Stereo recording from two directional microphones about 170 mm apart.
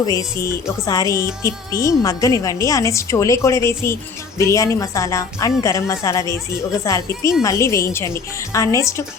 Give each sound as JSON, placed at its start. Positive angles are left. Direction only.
{"t": 0.0, "sound": "a woman's voice", "side_deg": 20}